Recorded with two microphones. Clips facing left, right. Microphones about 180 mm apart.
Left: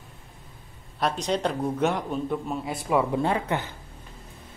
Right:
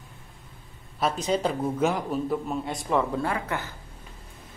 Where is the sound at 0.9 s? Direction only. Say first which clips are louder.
Right 1 dB; centre (ahead or behind).